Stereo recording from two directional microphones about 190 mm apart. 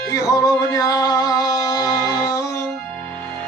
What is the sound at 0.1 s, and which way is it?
Music, 20° left (ahead or behind).